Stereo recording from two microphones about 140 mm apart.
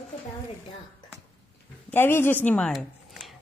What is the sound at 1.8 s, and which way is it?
Speech, 15° left (ahead or behind).